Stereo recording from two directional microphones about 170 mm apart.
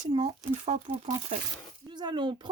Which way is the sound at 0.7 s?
35° right (ahead or behind).